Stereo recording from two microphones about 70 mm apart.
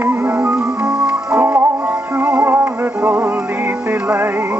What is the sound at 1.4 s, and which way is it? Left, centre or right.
Music, right.